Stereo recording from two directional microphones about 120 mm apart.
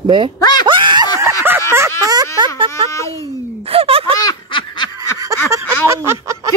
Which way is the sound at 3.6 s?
55° right (ahead or behind).